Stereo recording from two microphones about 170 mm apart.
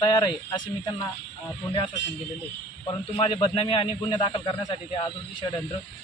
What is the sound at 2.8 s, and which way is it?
A man's voice, 30° left (ahead or behind).